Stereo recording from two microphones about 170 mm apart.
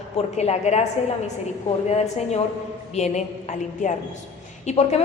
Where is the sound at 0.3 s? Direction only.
40° left (ahead or behind).